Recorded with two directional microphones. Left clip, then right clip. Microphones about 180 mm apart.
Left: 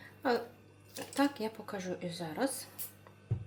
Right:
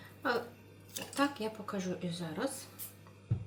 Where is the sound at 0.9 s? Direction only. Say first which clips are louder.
Left 1 dB; 25° left (ahead or behind).